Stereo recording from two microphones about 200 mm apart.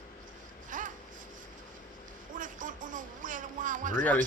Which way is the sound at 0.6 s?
40° right (ahead or behind).